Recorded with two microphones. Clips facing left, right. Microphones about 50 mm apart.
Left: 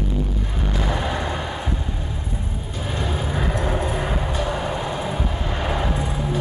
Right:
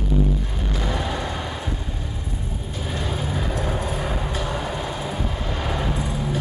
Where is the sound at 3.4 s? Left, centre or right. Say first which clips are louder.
Left 5 dB; left.